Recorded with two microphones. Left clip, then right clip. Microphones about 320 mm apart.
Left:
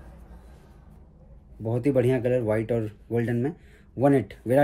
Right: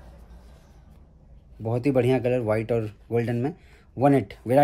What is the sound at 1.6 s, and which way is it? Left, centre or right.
Speech, right.